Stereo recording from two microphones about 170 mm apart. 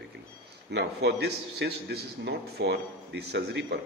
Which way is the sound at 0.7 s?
85° right.